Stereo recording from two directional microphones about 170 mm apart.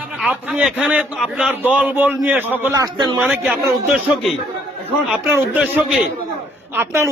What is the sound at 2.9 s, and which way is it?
Speech, 25° right (ahead or behind).